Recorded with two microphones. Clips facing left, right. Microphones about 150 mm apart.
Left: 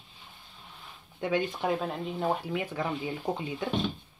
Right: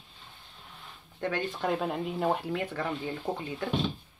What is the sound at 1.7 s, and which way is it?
Speech, centre (ahead or behind).